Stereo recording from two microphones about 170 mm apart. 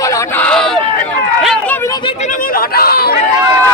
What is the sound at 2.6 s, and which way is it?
Chatter, 65° left (ahead or behind).